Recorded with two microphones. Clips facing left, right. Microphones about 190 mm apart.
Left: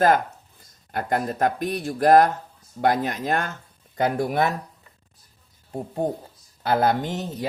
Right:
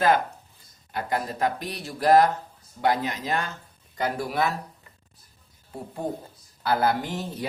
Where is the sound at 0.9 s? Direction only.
50° left (ahead or behind).